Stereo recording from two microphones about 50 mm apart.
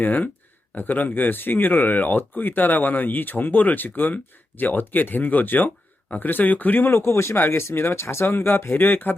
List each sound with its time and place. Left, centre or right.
0.0 s speech: left
7.3 s speech: left